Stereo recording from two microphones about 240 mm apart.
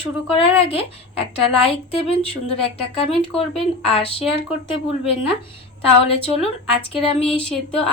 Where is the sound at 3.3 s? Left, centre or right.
Left.